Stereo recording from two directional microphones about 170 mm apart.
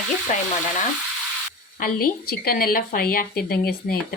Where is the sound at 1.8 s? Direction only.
60° left (ahead or behind).